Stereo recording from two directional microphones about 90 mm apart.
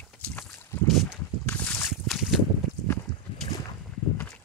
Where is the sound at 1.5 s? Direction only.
20° left (ahead or behind).